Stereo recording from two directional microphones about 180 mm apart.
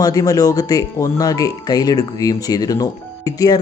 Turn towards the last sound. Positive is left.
turn(degrees=20)  # may be behind; listen again after turning